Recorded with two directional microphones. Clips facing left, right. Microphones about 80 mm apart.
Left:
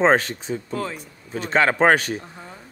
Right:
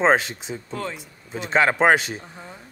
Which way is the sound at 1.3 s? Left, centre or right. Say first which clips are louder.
Even; centre.